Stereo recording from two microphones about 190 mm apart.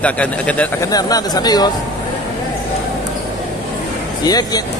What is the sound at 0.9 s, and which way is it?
Speech, 20° left (ahead or behind).